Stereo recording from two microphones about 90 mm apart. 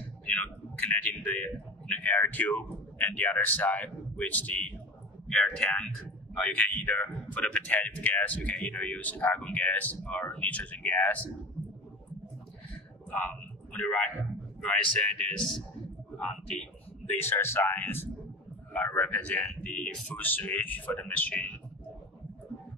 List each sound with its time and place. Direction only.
0.2 s a man's voice: 15° left (ahead or behind)
13.7 s a man's voice: 15° left (ahead or behind)
17.2 s a man's voice: 25° left (ahead or behind)